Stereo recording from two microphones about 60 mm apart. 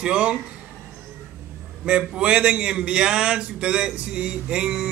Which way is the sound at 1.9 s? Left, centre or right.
Centre.